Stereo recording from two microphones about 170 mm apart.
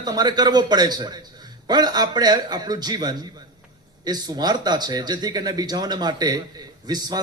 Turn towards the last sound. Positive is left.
turn(degrees=-25)  # may be behind; listen again after turning